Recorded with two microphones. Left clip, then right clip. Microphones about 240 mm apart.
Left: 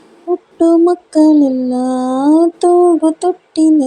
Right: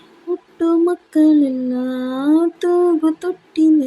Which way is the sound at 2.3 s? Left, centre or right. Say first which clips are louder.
Left 5 dB; centre.